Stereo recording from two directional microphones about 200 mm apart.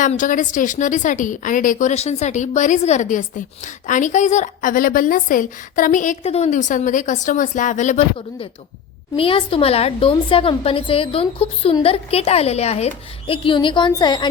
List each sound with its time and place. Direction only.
0.0 s a woman's voice: 40° left (ahead or behind); by 14.3 s 20° left (ahead or behind)